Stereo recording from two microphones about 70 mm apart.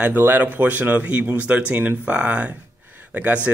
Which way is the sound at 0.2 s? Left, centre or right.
Right.